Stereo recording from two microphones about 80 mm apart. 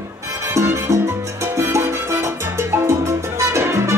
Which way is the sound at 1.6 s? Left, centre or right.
Right.